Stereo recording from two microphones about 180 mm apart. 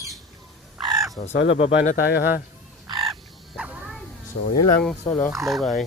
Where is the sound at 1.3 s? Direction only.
80° left.